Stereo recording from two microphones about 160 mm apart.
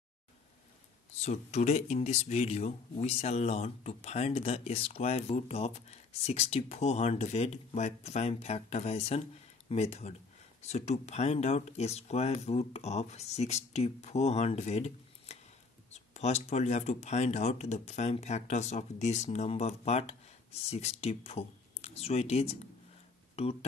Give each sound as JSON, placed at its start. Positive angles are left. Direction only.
{"t": 1.2, "sound": "speech", "side_deg": 45}